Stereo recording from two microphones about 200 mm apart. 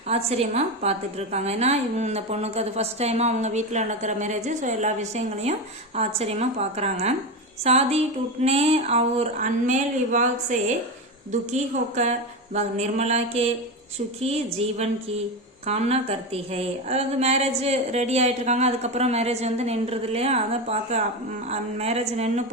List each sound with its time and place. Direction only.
0.1 s a woman's voice: 30° right (ahead or behind)
14.6 s a woman's voice: 30° right (ahead or behind)